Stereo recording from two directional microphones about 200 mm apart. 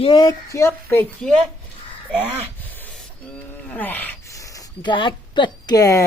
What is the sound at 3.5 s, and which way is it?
Speech, 5° left (ahead or behind).